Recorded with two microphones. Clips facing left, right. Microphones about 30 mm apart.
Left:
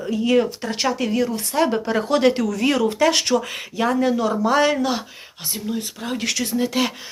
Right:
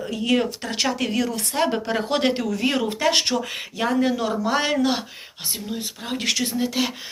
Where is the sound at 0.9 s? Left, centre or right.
Right.